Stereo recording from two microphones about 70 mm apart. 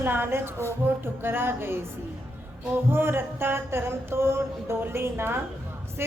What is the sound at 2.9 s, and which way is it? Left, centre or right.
Mantra, right.